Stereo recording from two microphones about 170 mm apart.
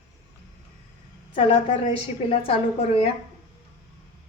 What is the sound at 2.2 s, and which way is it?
Speech, 35° left (ahead or behind).